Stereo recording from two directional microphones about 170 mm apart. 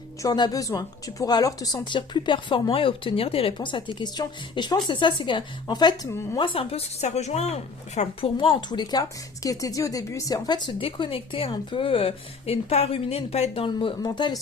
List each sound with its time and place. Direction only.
0.2 s a woman's voice: 25° left (ahead or behind)
6.4 s a woman's voice: 30° left (ahead or behind)